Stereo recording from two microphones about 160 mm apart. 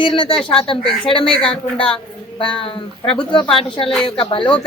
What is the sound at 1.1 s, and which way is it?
Speech, 35° left (ahead or behind).